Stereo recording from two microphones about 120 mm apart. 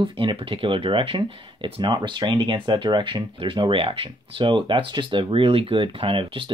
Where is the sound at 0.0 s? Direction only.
45° right (ahead or behind).